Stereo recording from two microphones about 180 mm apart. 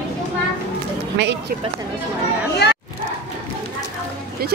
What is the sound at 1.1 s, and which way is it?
Speech, 80° right.